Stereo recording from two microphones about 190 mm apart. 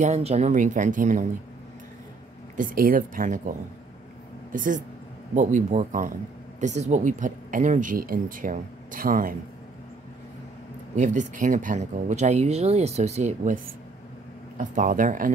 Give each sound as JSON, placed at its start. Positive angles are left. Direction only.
{"t": 0.0, "sound": "speech", "side_deg": -35}
{"t": 2.5, "sound": "a woman's voice", "side_deg": -45}
{"t": 11.0, "sound": "speech", "side_deg": -40}
{"t": 14.6, "sound": "a woman's voice", "side_deg": -45}